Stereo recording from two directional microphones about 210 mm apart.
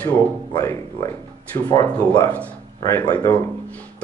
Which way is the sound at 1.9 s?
5° left (ahead or behind).